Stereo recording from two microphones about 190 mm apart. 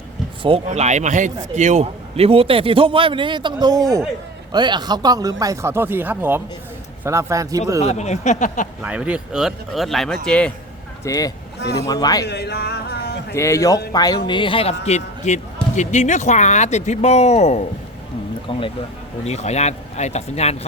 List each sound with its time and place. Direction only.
0.4 s a man's voice: 30° right (ahead or behind); by 7.6 s 15° right (ahead or behind)
7.8 s speech: 35° left (ahead or behind)
8.8 s speech: 5° right (ahead or behind)
11.0 s a man's voice: 20° left (ahead or behind)
12.2 s music: 60° left (ahead or behind)
13.3 s a man's voice: 15° left (ahead or behind); by 20.6 s 35° left (ahead or behind)